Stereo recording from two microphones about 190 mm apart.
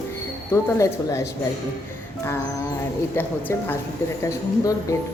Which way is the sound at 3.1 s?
10° left (ahead or behind).